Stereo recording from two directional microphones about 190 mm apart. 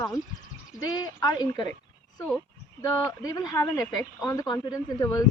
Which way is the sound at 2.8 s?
20° left (ahead or behind).